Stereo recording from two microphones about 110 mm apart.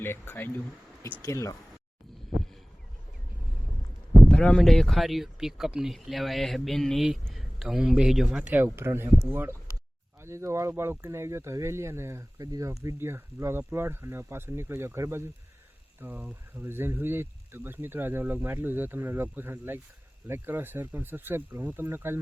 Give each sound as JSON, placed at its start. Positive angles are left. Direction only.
{"t": 0.0, "sound": "speech", "side_deg": 20}
{"t": 4.3, "sound": "speech", "side_deg": 5}